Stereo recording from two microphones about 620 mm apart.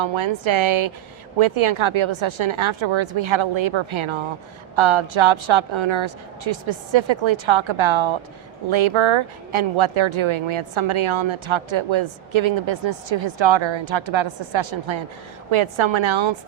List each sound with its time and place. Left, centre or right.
0.0 s speech: right